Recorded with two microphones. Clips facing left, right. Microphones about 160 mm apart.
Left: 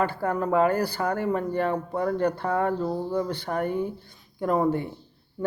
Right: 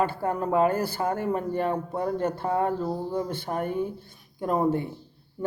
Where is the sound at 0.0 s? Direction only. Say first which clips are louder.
Left 1 dB; 20° right (ahead or behind).